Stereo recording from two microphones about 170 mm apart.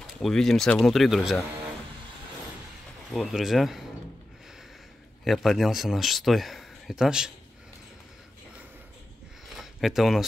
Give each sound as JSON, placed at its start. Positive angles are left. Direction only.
{"t": 0.2, "sound": "speech", "side_deg": 0}
{"t": 3.1, "sound": "speech", "side_deg": 0}
{"t": 5.2, "sound": "speech", "side_deg": 0}
{"t": 9.6, "sound": "a sound", "side_deg": 0}